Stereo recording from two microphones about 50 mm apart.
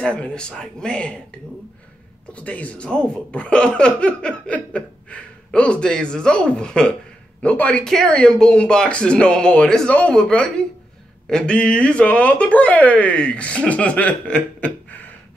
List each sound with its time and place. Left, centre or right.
0.1 s speech: left
2.3 s speech: left
8.3 s speech: centre
10.1 s speech: centre; by 15.1 s left